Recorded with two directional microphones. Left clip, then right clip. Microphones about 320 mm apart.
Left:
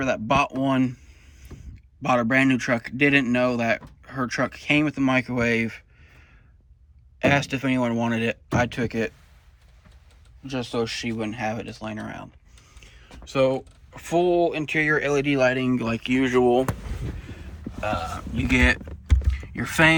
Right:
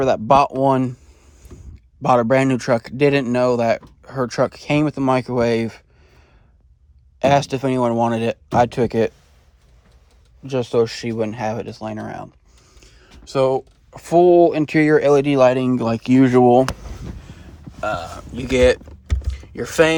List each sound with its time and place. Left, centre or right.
0.0 s speech: centre
2.0 s speech: centre
10.4 s speech: right
14.1 s speech: right
14.8 s speech: centre
17.7 s speech: centre
19.3 s a sound: centre